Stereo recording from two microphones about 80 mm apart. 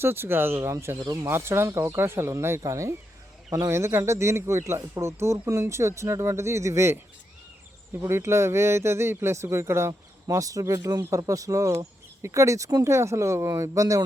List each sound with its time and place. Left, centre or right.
0.0 s speech: right
8.0 s speech: right
10.2 s speech: right